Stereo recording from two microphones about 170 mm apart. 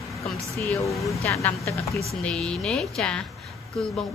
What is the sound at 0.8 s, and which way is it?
Speech, 20° left (ahead or behind).